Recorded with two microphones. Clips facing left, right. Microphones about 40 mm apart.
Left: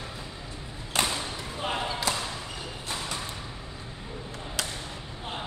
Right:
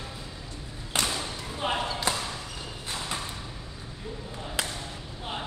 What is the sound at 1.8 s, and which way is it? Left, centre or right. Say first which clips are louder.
Basketball bounce: even; centre.